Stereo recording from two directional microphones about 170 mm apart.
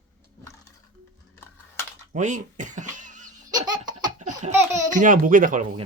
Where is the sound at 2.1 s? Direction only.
45° right (ahead or behind).